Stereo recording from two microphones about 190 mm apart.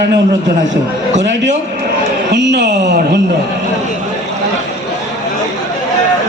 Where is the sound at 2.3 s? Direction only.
65° right (ahead or behind).